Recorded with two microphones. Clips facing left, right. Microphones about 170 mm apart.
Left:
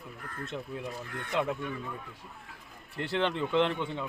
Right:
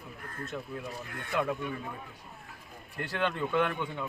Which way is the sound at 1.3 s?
20° left (ahead or behind).